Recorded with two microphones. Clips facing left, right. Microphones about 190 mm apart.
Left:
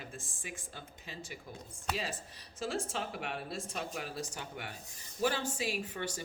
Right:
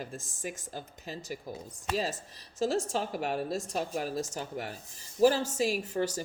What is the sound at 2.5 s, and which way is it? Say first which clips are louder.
Speech: right 7 dB; 40° right (ahead or behind).